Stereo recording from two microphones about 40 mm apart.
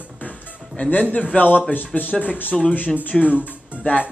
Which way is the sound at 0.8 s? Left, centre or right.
Left.